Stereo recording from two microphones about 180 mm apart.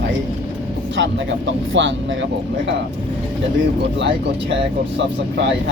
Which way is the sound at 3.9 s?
80° right.